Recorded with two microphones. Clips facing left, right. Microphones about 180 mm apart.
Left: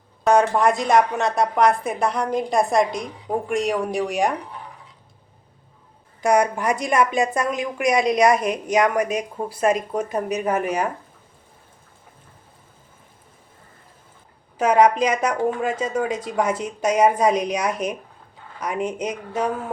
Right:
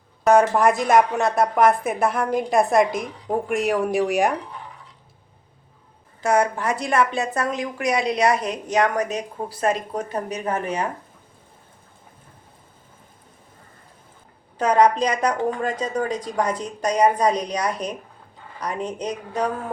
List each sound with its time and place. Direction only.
0.3 s speech: centre (ahead or behind)
6.2 s a woman's voice: 15° left (ahead or behind)
14.6 s a woman's voice: 10° left (ahead or behind)